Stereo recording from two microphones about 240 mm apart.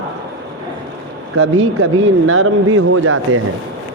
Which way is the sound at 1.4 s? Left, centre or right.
Right.